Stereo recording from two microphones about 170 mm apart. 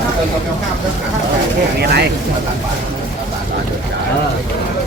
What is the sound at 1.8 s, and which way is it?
Speech, 70° right (ahead or behind).